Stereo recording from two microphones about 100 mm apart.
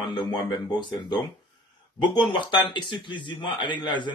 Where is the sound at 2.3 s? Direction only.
50° left (ahead or behind).